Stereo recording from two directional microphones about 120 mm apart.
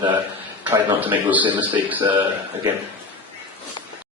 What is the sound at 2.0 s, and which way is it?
Speech, 40° right (ahead or behind).